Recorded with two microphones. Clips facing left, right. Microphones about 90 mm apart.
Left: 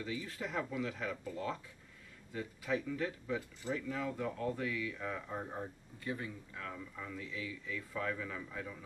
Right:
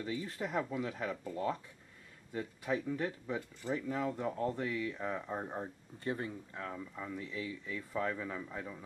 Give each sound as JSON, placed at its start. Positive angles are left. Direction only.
{"t": 0.0, "sound": "speech", "side_deg": -35}
{"t": 6.0, "sound": "speech", "side_deg": -35}